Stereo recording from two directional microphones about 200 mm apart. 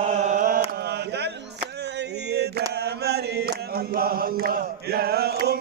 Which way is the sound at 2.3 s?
55° right (ahead or behind).